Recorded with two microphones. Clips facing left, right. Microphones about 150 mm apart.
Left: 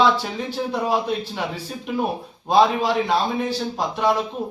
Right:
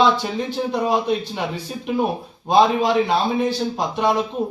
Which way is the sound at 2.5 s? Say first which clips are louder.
Right 2 dB; centre (ahead or behind).